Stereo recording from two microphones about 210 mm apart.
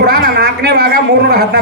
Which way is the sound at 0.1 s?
50° right (ahead or behind).